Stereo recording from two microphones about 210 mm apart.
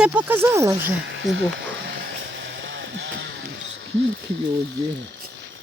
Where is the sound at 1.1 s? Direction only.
60° right (ahead or behind).